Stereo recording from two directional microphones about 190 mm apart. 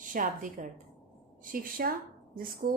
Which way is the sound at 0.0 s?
45° right (ahead or behind).